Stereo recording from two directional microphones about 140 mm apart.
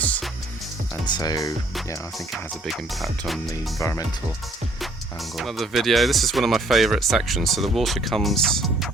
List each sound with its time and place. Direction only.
1.0 s speech: 30° left (ahead or behind)
2.1 s speech: centre (ahead or behind)
3.8 s speech: 25° left (ahead or behind)
5.4 s speech: centre (ahead or behind)